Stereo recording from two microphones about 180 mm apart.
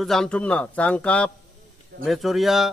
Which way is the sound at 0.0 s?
Centre (ahead or behind).